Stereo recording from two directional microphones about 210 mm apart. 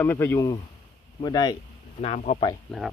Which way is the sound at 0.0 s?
10° left (ahead or behind).